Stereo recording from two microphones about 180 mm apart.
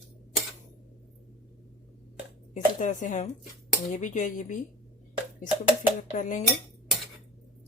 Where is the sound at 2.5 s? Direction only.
45° left (ahead or behind).